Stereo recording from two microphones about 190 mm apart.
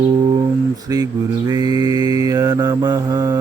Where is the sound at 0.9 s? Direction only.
20° right (ahead or behind).